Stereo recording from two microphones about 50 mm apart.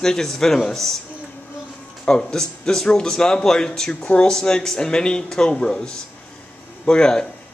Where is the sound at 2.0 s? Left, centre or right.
Centre.